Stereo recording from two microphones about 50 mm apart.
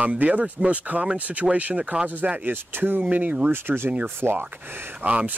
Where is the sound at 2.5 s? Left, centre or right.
Right.